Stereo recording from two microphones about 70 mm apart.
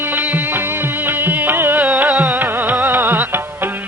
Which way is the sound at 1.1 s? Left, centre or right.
Right.